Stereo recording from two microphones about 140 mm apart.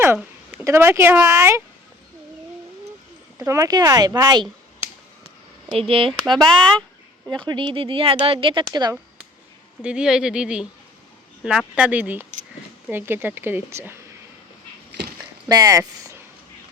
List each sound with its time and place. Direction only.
0.6 s speech: 20° right (ahead or behind)
3.3 s speech: 20° right (ahead or behind)
5.7 s speech: 40° right (ahead or behind)
6.1 s speech: centre (ahead or behind)
7.4 s speech: 35° right (ahead or behind)
8.6 s speech: 25° right (ahead or behind)
9.8 s a woman's voice: 5° right (ahead or behind)
15.4 s speech: 25° right (ahead or behind)